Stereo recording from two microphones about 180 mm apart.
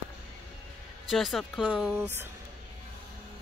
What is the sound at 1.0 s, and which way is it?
Speech, centre (ahead or behind).